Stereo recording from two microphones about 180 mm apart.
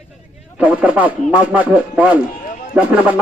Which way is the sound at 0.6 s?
5° right (ahead or behind).